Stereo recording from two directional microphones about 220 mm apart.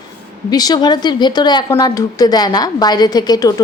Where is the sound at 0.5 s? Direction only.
20° left (ahead or behind).